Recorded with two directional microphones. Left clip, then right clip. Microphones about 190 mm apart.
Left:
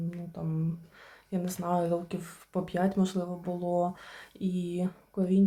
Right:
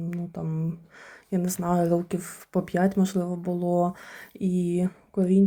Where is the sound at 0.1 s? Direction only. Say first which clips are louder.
Right 4 dB; 20° right (ahead or behind).